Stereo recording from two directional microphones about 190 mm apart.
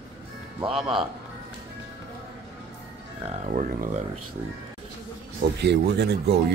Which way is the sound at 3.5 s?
45° right (ahead or behind).